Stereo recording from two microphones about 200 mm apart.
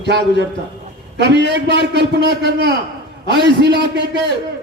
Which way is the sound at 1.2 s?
60° right (ahead or behind).